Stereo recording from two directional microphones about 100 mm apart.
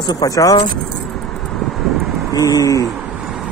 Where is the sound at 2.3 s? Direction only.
40° left (ahead or behind).